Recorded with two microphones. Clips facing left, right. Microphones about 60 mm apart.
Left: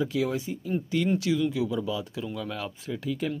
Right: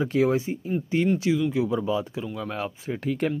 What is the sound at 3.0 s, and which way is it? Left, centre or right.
Speech, right.